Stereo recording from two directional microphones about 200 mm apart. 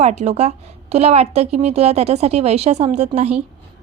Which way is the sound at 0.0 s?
35° right (ahead or behind).